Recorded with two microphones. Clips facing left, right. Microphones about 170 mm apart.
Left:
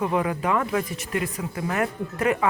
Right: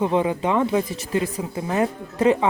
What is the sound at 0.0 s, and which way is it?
Speech, 25° right (ahead or behind).